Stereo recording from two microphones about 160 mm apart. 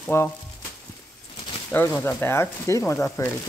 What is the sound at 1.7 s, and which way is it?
Speech, 15° left (ahead or behind).